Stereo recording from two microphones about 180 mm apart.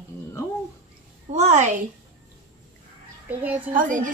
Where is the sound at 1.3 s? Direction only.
40° right (ahead or behind).